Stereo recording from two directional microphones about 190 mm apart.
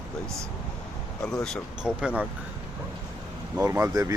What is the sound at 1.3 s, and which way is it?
Speech, centre (ahead or behind).